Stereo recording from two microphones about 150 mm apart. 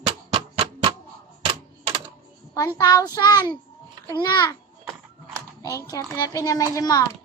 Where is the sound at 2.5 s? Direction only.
25° left (ahead or behind).